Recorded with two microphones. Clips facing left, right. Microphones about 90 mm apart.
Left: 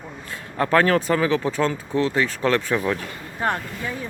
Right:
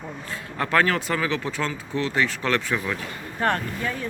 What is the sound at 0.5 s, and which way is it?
Speech, 30° left (ahead or behind).